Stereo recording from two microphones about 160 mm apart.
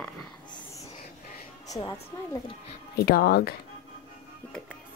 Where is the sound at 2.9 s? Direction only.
75° left (ahead or behind).